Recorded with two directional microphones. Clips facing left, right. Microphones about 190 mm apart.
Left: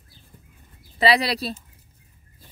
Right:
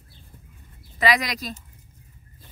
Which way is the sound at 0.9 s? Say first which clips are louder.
Left 3 dB; 30° left (ahead or behind).